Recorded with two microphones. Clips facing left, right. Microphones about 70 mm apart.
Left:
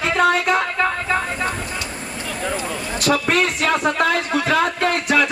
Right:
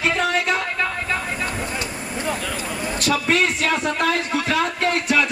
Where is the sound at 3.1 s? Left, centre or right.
Left.